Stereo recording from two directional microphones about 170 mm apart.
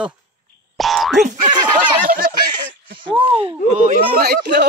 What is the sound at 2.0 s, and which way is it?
Speech, 55° right (ahead or behind).